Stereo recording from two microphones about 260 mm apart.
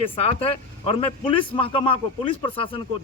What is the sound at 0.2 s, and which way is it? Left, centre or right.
A man's voice, left.